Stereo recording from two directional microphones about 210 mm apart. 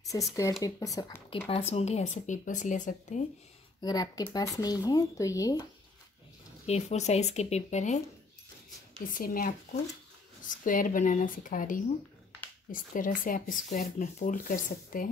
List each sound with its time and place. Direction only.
0.4 s speech: 15° left (ahead or behind)
1.5 s speech: 30° left (ahead or behind)
3.8 s speech: 20° left (ahead or behind)
6.6 s speech: 30° left (ahead or behind)
9.1 s speech: 40° left (ahead or behind)